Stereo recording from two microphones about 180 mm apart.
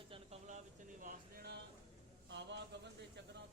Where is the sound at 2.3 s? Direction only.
75° right (ahead or behind).